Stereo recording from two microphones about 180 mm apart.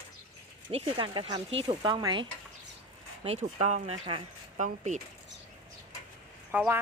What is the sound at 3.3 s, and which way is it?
Speech, 40° right (ahead or behind).